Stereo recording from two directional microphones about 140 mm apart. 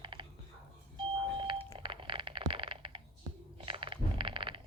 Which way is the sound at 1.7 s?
40° right (ahead or behind).